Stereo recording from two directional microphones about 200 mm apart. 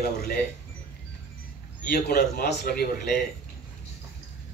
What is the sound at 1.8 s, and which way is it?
Speech, 50° left (ahead or behind).